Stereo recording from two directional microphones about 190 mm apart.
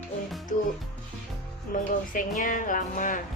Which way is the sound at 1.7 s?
45° left (ahead or behind).